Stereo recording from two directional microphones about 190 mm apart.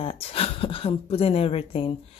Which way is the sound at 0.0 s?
30° left (ahead or behind).